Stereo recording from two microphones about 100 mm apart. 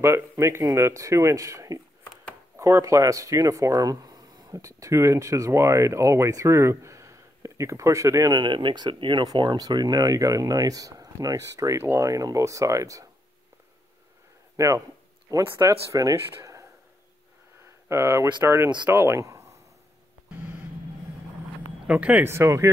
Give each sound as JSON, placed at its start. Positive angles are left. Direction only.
{"t": 0.0, "sound": "speech", "side_deg": -25}
{"t": 8.3, "sound": "speech", "side_deg": -50}
{"t": 14.6, "sound": "speech", "side_deg": -25}
{"t": 15.3, "sound": "speech", "side_deg": -35}
{"t": 17.8, "sound": "speech", "side_deg": -30}
{"t": 21.8, "sound": "speech", "side_deg": -15}
{"t": 22.3, "sound": "speech", "side_deg": -30}